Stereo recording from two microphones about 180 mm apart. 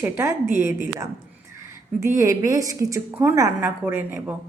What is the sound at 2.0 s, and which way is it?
A woman's voice, 15° right (ahead or behind).